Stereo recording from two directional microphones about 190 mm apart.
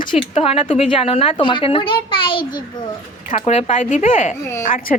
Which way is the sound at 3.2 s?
35° left (ahead or behind).